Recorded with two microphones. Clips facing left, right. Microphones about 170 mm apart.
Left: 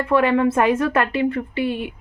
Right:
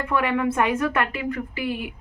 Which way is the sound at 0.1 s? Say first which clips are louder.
Left 6 dB; 35° left (ahead or behind).